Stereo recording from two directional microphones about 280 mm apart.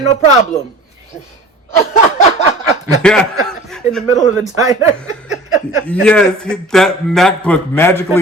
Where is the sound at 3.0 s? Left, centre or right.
Centre.